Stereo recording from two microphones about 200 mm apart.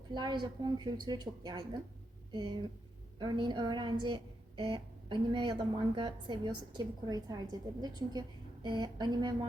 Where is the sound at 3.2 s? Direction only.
25° right (ahead or behind).